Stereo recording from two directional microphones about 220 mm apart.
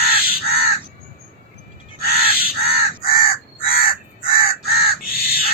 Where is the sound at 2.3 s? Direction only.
45° left (ahead or behind).